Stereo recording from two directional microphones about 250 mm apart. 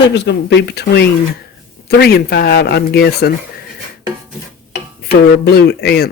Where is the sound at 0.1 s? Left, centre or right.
Left.